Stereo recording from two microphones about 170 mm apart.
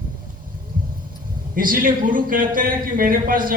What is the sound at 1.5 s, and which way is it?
A man's voice, 55° right (ahead or behind).